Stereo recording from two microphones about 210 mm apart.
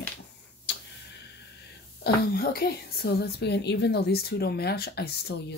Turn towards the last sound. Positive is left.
turn(degrees=55)  # may be behind; listen again after turning